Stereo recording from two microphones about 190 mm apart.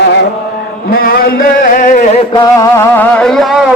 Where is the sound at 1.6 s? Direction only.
45° left (ahead or behind).